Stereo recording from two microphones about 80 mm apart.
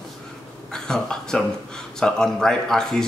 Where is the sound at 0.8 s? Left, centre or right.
Centre.